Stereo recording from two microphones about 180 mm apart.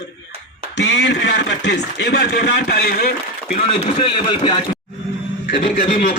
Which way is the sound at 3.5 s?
30° left (ahead or behind).